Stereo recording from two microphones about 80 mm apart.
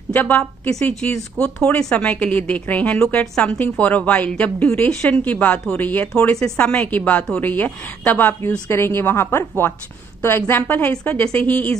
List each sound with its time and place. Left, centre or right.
0.1 s a woman's voice: centre
1.8 s a woman's voice: centre